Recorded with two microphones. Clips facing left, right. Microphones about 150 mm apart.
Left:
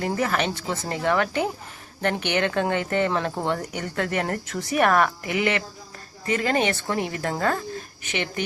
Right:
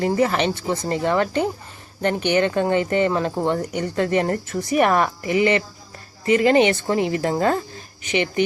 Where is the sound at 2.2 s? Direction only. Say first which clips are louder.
Right 6 dB; 10° right (ahead or behind).